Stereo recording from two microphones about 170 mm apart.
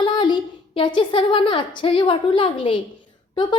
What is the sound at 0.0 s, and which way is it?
A woman's voice, 25° left (ahead or behind).